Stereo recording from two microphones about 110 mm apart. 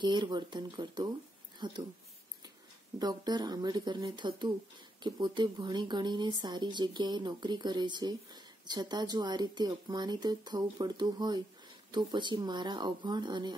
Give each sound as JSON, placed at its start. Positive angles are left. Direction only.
{"t": 0.0, "sound": "speech", "side_deg": -45}
{"t": 3.0, "sound": "speech", "side_deg": -40}